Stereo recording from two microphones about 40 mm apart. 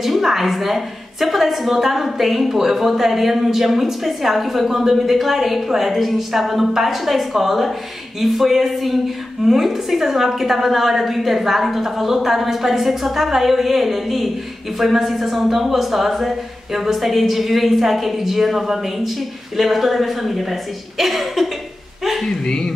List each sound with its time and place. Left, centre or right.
0.0 s a woman's voice: centre
22.2 s speech: centre